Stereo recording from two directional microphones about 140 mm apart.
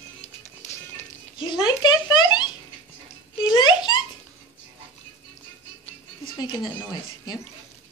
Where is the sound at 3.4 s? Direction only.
30° left (ahead or behind).